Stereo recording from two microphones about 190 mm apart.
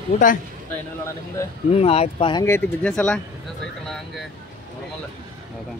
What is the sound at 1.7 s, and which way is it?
Speech, 35° left (ahead or behind).